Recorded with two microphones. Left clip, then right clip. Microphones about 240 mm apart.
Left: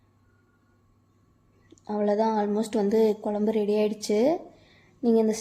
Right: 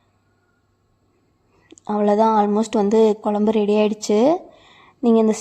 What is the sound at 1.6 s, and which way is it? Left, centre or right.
Speech, right.